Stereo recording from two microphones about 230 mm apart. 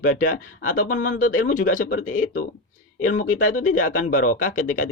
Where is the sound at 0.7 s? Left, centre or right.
Left.